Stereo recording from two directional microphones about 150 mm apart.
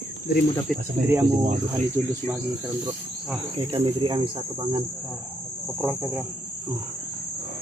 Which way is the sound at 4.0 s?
35° right (ahead or behind).